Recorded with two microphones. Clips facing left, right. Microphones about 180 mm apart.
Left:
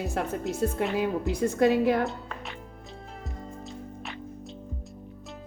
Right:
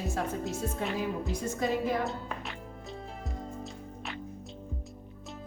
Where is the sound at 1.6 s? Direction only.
65° left (ahead or behind).